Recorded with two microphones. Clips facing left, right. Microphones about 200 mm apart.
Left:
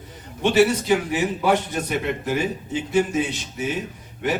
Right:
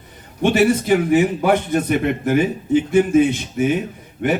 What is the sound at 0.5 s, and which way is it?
A man's voice, 55° right (ahead or behind).